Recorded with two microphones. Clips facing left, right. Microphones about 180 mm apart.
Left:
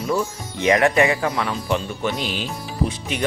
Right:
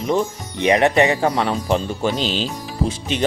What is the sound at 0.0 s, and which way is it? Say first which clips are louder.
Speech: right 3 dB; 20° right (ahead or behind).